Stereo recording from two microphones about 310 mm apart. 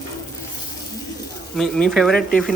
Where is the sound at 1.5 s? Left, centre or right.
Centre.